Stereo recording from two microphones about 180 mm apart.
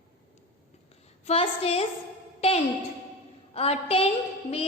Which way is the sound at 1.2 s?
35° left (ahead or behind).